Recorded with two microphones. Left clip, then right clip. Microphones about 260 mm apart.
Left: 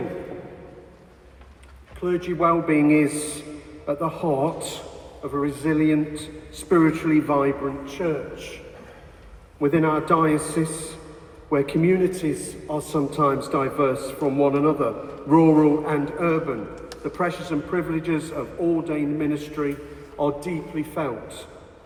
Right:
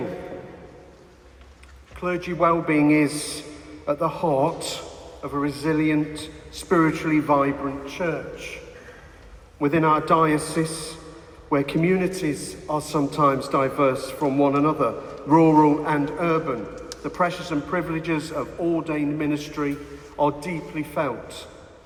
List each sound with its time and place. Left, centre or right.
2.0 s a man's voice: right
9.6 s a man's voice: right